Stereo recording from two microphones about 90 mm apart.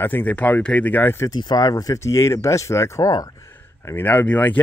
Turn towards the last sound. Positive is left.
turn(degrees=20)  # may be behind; listen again after turning